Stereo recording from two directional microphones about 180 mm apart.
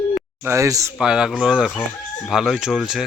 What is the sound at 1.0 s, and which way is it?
Speech, 5° right (ahead or behind).